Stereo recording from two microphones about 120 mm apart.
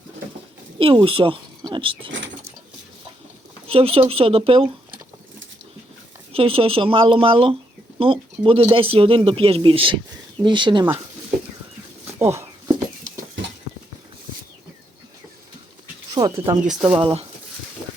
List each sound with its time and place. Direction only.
0.8 s speech: 50° right (ahead or behind)
3.7 s speech: 55° right (ahead or behind)
6.3 s speech: 50° right (ahead or behind)
12.2 s a sound: 25° right (ahead or behind)
16.0 s bird: 35° right (ahead or behind)
16.9 s speech: 50° right (ahead or behind)